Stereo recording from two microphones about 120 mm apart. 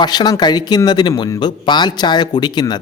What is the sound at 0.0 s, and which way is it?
Speech, 35° left (ahead or behind).